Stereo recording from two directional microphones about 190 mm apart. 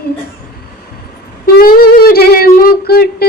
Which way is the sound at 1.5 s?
50° left (ahead or behind).